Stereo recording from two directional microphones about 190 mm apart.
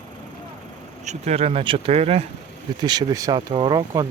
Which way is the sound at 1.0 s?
35° right (ahead or behind).